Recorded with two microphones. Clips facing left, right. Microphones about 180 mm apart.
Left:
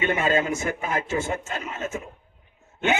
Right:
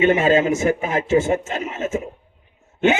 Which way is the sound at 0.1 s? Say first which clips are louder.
Right 7 dB; 25° right (ahead or behind).